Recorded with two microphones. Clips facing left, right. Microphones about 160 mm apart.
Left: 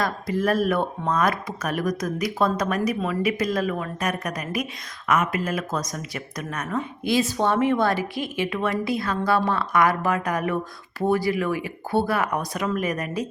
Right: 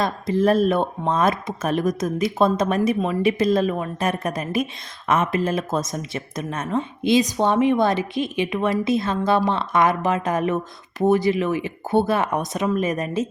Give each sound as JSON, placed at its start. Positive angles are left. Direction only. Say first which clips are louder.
{"t": 0.0, "sound": "speech", "louder": "right 4 dB", "side_deg": -25}